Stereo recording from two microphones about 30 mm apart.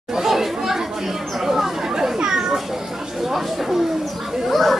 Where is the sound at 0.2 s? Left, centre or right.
Centre.